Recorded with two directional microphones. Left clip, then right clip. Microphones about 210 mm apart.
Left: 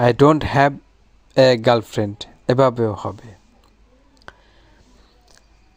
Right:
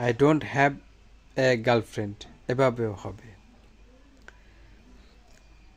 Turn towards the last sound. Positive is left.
turn(degrees=25)  # may be behind; listen again after turning